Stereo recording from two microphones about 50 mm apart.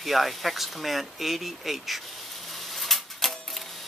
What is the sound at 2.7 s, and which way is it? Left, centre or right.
Typewriter, centre.